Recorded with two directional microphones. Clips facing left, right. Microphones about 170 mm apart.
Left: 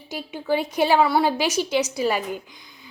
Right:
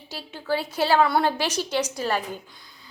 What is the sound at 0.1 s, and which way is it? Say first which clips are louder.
A woman's voice: left 3 dB; 15° left (ahead or behind).